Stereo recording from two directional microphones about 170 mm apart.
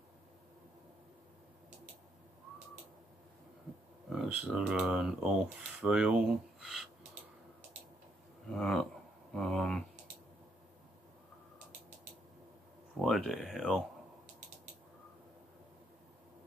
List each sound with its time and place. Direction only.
4.1 s speech: 5° right (ahead or behind)
8.5 s speech: centre (ahead or behind)
13.0 s speech: centre (ahead or behind)